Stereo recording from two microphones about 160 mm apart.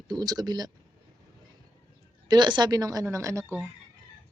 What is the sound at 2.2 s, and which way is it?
A woman's voice, 30° right (ahead or behind).